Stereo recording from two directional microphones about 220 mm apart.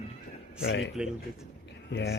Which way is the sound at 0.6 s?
55° left (ahead or behind).